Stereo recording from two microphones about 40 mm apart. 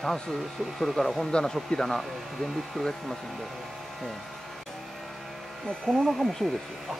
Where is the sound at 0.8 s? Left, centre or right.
Centre.